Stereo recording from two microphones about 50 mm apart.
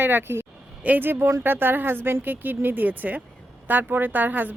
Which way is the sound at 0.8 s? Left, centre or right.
Right.